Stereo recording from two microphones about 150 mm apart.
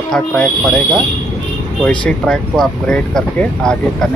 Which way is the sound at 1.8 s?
5° left (ahead or behind).